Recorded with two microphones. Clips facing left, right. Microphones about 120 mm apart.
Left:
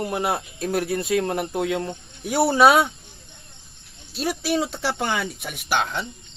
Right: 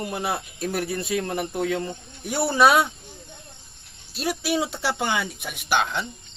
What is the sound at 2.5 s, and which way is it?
Speech, centre (ahead or behind).